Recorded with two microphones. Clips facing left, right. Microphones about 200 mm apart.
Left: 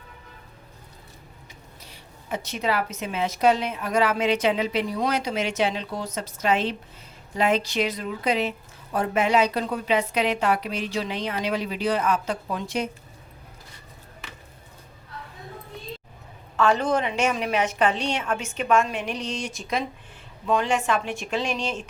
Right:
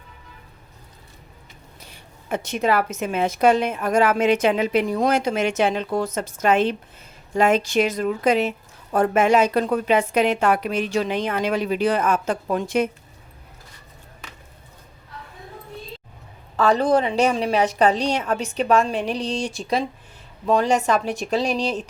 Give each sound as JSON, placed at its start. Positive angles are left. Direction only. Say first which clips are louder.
{"t": 2.3, "sound": "a woman's voice", "louder": "right 5 dB", "side_deg": -50}
{"t": 16.6, "sound": "a woman's voice", "louder": "right 4 dB", "side_deg": -35}